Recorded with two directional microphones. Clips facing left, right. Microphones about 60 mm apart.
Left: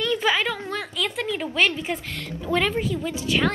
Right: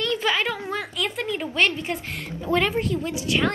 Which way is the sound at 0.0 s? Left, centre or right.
Centre.